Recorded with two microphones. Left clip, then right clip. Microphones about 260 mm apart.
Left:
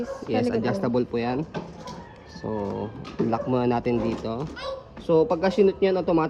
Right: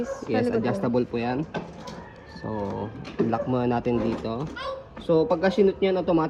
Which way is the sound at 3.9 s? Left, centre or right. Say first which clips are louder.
Even; left.